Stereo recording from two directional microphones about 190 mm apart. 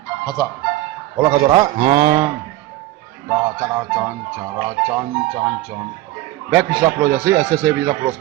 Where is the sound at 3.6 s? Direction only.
15° right (ahead or behind).